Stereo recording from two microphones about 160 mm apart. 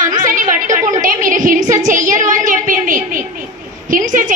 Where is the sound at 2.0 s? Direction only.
55° right (ahead or behind).